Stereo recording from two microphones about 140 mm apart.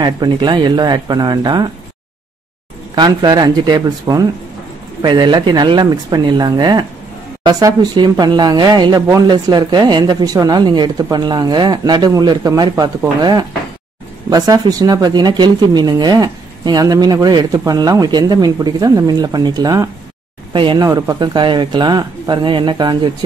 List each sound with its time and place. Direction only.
0.0 s speech: 30° right (ahead or behind)
3.0 s speech: 30° right (ahead or behind)